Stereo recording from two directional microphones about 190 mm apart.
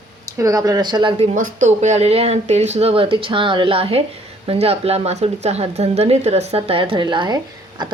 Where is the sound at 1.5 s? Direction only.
40° right (ahead or behind); by 7.8 s 20° right (ahead or behind).